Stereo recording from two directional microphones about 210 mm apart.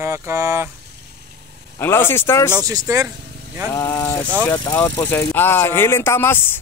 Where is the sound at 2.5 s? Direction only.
15° right (ahead or behind).